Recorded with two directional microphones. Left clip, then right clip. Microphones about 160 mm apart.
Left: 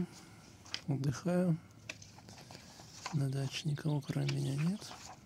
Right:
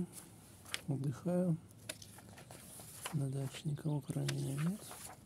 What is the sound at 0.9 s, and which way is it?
Speech, 5° left (ahead or behind).